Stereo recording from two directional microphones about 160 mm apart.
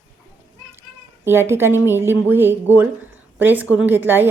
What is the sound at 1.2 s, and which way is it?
A woman's voice, 15° right (ahead or behind).